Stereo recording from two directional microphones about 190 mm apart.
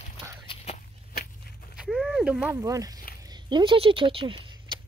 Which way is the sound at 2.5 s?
15° right (ahead or behind).